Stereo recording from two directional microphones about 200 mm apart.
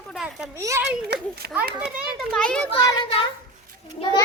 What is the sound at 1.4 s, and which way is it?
Speech, 50° right (ahead or behind).